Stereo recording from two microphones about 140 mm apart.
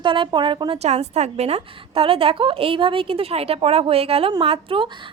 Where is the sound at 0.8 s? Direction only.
55° right (ahead or behind).